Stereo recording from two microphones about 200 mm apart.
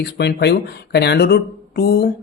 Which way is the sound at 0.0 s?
55° left (ahead or behind).